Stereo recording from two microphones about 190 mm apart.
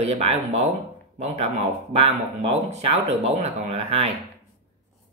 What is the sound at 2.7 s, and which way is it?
Speech, 35° right (ahead or behind).